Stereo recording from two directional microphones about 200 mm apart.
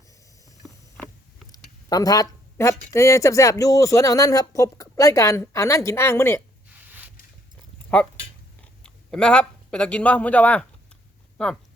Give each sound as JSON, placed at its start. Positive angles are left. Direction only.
{"t": 0.4, "sound": "vehicle", "side_deg": 15}
{"t": 1.5, "sound": "speech", "side_deg": 20}
{"t": 8.6, "sound": "speech", "side_deg": 5}